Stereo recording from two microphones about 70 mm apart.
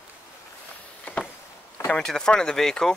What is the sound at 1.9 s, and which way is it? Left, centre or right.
Speech, centre.